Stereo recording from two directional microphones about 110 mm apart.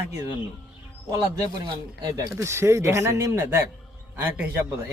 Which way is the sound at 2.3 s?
25° right (ahead or behind).